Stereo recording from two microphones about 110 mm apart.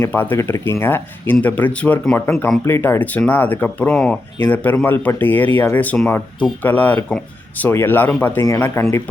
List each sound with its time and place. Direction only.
0.0 s speech: 20° left (ahead or behind)